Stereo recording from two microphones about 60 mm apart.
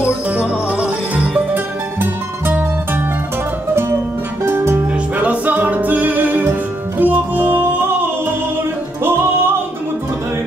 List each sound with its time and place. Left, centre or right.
0.4 s music: centre
1.5 s music: right
4.5 s music: right
5.1 s music: right